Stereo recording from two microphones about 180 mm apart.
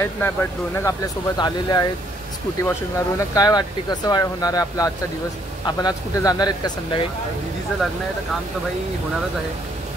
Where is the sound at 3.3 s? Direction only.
20° left (ahead or behind).